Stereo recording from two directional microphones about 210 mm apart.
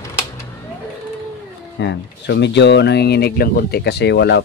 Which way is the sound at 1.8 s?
55° left (ahead or behind).